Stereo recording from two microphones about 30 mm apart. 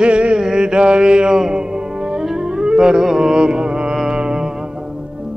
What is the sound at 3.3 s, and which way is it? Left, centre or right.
Music, right.